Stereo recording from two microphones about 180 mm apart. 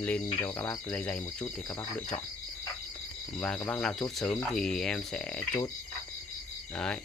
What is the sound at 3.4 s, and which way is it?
Speech, 10° left (ahead or behind).